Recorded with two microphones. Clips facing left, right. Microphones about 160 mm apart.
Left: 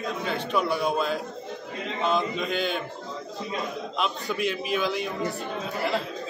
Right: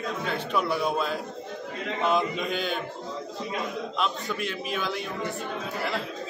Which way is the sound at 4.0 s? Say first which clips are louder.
Left 3 dB; 5° left (ahead or behind).